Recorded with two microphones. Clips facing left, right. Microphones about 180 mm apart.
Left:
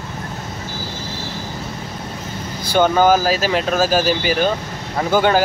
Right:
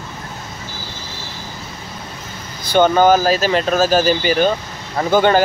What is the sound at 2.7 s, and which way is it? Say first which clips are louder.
Speech: right 2 dB; 5° left (ahead or behind).